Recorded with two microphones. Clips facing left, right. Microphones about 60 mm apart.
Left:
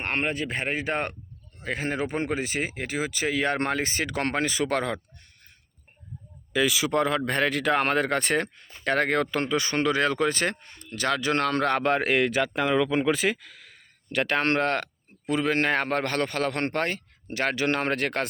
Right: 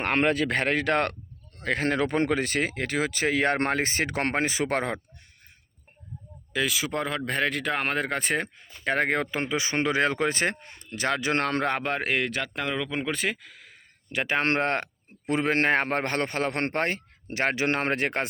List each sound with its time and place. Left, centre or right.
0.0 s speech: right
1.5 s speech: right
6.5 s speech: centre; by 11.6 s right
11.8 s speech: centre
14.3 s a man's voice: right